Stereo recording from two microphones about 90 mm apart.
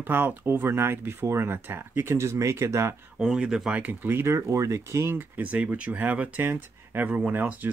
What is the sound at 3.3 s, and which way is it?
Speech, 10° right (ahead or behind).